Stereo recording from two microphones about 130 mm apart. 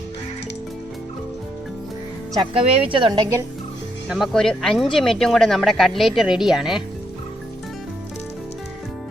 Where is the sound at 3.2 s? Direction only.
20° right (ahead or behind).